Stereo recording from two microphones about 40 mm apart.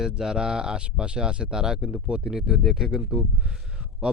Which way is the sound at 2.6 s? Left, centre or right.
Centre.